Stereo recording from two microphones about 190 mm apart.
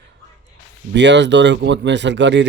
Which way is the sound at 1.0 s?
70° right (ahead or behind).